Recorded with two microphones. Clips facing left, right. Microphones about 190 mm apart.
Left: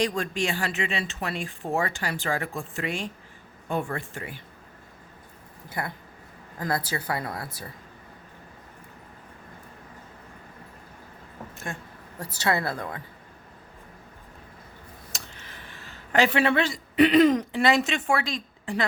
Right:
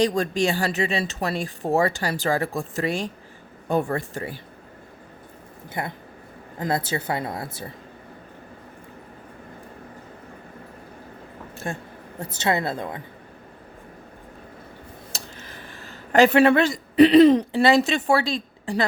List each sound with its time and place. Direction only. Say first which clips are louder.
0.0 s speech: right 5 dB; 35° right (ahead or behind)
5.6 s speech: right 2 dB; 20° right (ahead or behind)
11.5 s speech: right 6 dB; 35° right (ahead or behind)
12.2 s speech: right 3 dB; 20° right (ahead or behind)
15.1 s speech: right 3 dB; 40° right (ahead or behind)